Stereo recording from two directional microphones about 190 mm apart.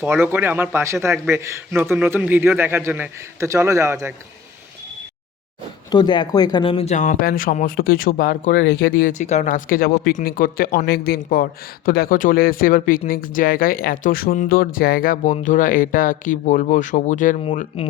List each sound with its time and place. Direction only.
0.0 s a man's voice: 10° right (ahead or behind)
5.9 s speech: 20° left (ahead or behind); by 10.8 s 45° left (ahead or behind)
10.8 s speech: 55° left (ahead or behind); by 17.8 s 35° left (ahead or behind)